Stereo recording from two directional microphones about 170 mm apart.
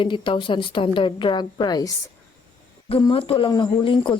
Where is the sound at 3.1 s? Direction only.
30° left (ahead or behind).